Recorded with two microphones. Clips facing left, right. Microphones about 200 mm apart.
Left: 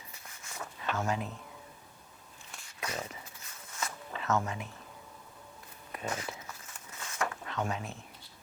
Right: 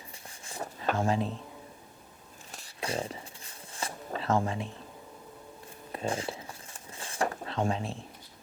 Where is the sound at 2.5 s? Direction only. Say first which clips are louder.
Right 5 dB; 30° right (ahead or behind).